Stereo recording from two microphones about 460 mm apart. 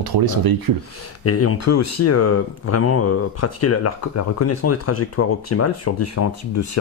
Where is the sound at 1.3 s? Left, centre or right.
Left.